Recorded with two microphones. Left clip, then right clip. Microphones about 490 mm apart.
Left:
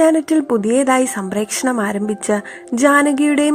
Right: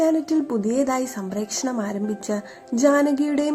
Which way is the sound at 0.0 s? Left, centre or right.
Centre.